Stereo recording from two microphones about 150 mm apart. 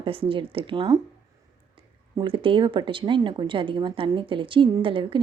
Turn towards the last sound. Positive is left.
turn(degrees=-35)  # may be behind; listen again after turning